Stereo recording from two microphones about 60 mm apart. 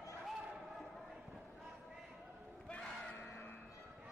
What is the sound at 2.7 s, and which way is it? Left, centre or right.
Crowd, centre.